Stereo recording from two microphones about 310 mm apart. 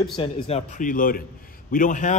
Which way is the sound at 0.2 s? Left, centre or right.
Centre.